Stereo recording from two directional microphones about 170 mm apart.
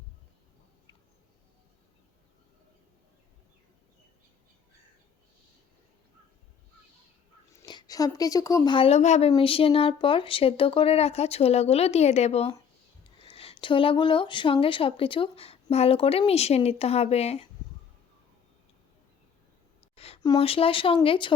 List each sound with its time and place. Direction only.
7.5 s speech: 25° left (ahead or behind)
20.2 s speech: 30° left (ahead or behind)